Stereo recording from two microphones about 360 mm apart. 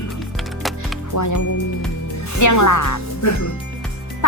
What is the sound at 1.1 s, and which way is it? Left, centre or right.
Speech, left.